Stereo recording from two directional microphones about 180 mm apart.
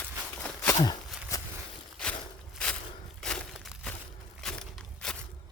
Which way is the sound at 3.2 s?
5° left (ahead or behind).